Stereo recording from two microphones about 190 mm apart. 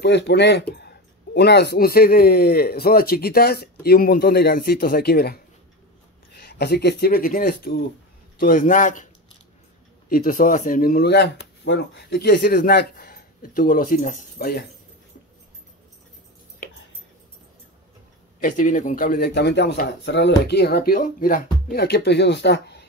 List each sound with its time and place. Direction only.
0.0 s speech: 65° left (ahead or behind); by 14.6 s 50° left (ahead or behind)
16.6 s a sound: 50° left (ahead or behind)
18.4 s speech: 45° left (ahead or behind); by 22.8 s 60° left (ahead or behind)